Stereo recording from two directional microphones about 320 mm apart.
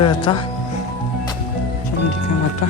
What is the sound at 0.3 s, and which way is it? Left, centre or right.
Speech, centre.